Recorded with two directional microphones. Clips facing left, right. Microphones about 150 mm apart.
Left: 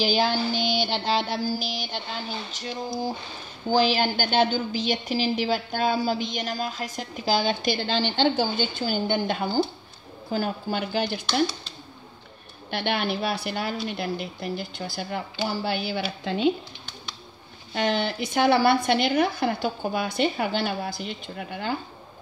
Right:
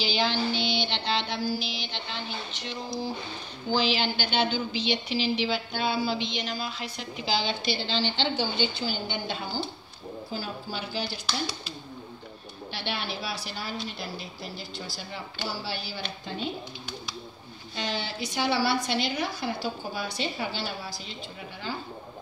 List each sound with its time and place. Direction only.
0.0 s music: 45° left (ahead or behind)
3.7 s a woman's voice: 45° left (ahead or behind)
12.7 s a woman's voice: 55° left (ahead or behind)
16.3 s speech: 85° left
17.7 s a woman's voice: 55° left (ahead or behind)